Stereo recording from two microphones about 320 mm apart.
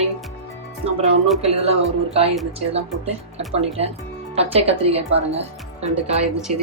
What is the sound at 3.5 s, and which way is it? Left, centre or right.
Speech, centre.